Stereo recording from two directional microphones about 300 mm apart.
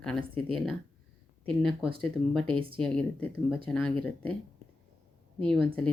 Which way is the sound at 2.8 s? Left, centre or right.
Centre.